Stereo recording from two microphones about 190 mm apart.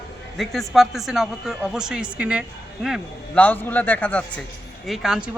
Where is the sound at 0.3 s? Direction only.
Centre (ahead or behind).